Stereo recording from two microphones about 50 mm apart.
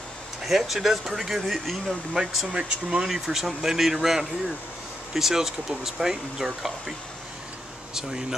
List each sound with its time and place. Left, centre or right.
0.4 s speech: centre
2.2 s speech: centre
3.1 s speech: centre
7.9 s speech: centre